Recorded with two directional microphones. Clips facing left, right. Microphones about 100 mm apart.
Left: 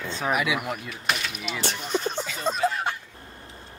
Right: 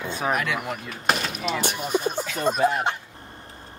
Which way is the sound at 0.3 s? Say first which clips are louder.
Left 1 dB; 5° left (ahead or behind).